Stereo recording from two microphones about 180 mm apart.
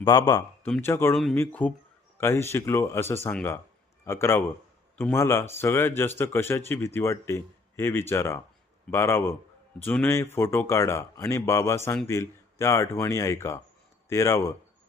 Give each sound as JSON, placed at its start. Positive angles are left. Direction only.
{"t": 0.0, "sound": "a man's voice", "side_deg": 20}
{"t": 1.1, "sound": "speech", "side_deg": 0}